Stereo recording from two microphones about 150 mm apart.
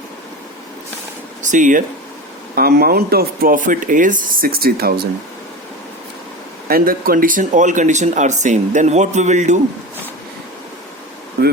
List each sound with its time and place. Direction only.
1.4 s speech: 55° right (ahead or behind)
2.6 s speech: 90° right
6.7 s speech: 80° right; by 9.6 s 50° right (ahead or behind)